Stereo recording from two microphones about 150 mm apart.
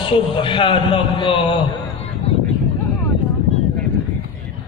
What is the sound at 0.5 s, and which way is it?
A man's voice, 35° left (ahead or behind).